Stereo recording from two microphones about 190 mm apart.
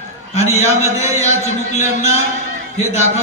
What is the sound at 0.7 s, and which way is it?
Speech, 15° right (ahead or behind).